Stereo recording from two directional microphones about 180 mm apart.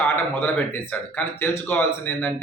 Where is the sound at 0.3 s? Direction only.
10° left (ahead or behind).